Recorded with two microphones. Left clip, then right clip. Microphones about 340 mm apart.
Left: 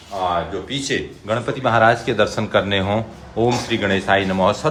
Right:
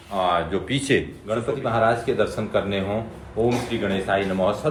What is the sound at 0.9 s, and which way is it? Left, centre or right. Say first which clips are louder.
Speech: right 2 dB; centre.